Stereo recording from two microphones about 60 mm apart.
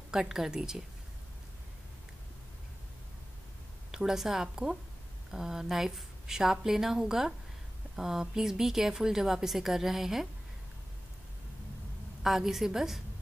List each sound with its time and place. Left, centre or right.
0.1 s a woman's voice: centre
3.9 s a woman's voice: centre
12.2 s a woman's voice: centre